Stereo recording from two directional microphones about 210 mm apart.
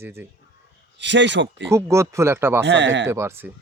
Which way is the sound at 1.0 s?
60° right (ahead or behind).